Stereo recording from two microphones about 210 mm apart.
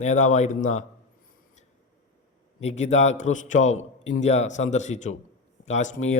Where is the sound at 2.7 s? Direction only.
30° left (ahead or behind).